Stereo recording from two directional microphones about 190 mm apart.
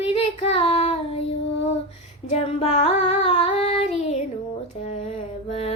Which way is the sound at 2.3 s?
30° left (ahead or behind).